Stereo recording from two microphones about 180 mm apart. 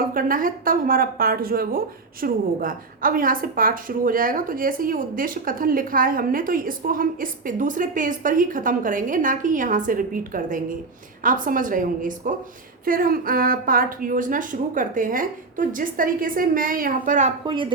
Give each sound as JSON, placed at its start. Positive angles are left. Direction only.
{"t": 0.0, "sound": "a woman's voice", "side_deg": -50}
{"t": 17.4, "sound": "a woman's voice", "side_deg": -25}